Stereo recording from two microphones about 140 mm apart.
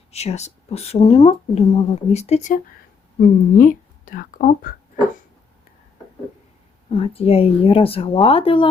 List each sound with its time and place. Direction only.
0.1 s speech: 50° left (ahead or behind)
3.2 s speech: 75° left (ahead or behind)
6.9 s speech: 45° left (ahead or behind)